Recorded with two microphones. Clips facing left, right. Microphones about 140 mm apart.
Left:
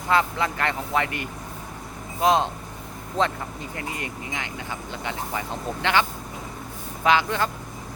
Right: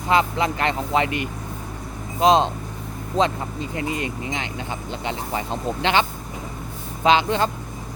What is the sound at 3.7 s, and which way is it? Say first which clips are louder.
Speech: right 8 dB; 20° right (ahead or behind).